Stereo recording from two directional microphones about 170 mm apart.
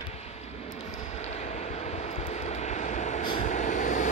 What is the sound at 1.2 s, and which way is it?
Vehicle, 40° left (ahead or behind).